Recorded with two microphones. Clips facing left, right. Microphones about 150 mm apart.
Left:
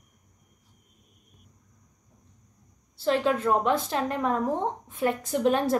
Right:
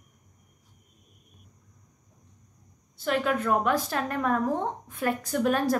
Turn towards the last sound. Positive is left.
turn(degrees=25)  # may be behind; listen again after turning